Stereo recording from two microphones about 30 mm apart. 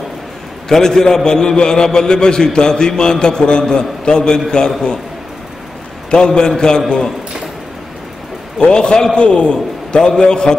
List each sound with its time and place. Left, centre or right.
0.7 s a man's voice: centre
6.0 s a man's voice: left
8.5 s a man's voice: left
9.2 s a man's voice: left
9.9 s a man's voice: left